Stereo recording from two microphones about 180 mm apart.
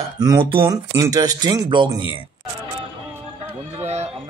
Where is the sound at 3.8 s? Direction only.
40° right (ahead or behind).